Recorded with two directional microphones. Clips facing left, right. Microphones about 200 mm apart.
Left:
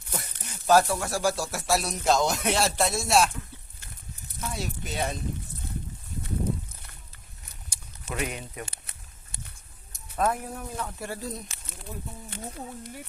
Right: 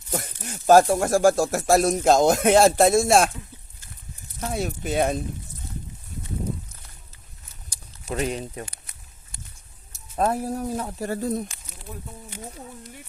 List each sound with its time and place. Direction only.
0.1 s speech: 50° right (ahead or behind)
4.4 s speech: 55° right (ahead or behind)
7.7 s a sound: 35° right (ahead or behind)
8.6 s walk: 25° left (ahead or behind)
10.2 s speech: 35° right (ahead or behind)
11.1 s speech: 50° right (ahead or behind)